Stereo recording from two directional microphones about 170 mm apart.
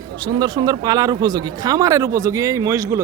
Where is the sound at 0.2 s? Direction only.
25° right (ahead or behind).